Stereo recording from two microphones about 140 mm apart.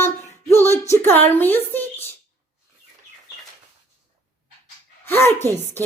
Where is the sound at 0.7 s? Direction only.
20° left (ahead or behind).